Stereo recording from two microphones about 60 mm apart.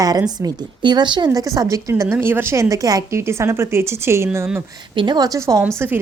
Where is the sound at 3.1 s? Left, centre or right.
Right.